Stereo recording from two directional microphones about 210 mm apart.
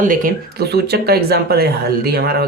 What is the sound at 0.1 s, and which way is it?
Speech, 40° right (ahead or behind).